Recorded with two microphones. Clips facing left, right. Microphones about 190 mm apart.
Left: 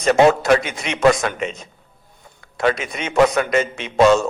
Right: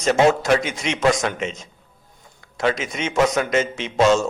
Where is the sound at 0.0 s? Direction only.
60° left (ahead or behind).